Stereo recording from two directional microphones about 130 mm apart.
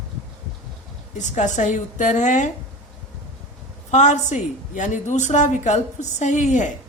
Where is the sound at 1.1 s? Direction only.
70° left (ahead or behind).